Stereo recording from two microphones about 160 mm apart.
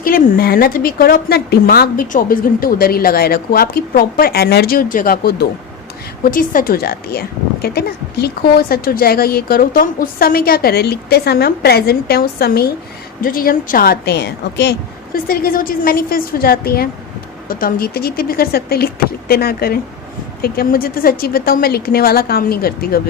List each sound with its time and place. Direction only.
0.0 s a woman's voice: 65° left (ahead or behind)